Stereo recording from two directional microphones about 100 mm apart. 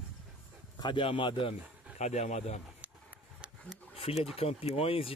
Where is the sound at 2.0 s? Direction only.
90° left.